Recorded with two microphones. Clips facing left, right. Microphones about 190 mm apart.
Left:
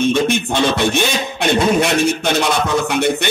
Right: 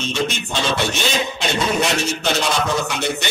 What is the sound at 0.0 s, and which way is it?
A man's voice, 55° left (ahead or behind).